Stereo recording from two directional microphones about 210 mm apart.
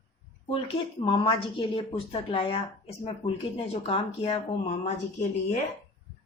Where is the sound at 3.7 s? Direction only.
30° left (ahead or behind).